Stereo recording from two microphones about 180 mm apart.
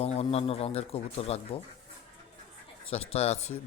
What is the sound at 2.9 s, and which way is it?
Speech, 35° left (ahead or behind).